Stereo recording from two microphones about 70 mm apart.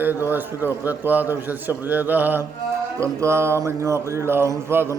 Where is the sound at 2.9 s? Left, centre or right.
Right.